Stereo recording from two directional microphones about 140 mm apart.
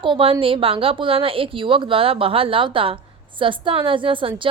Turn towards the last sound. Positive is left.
turn(degrees=-35)  # may be behind; listen again after turning